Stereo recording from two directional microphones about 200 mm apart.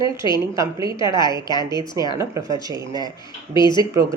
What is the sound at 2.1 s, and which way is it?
Speech, 15° right (ahead or behind).